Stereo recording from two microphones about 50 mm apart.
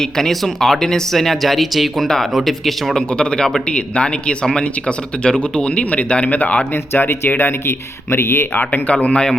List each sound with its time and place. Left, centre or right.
0.0 s speech: centre
3.1 s speech: centre
7.0 s speech: left
8.9 s speech: left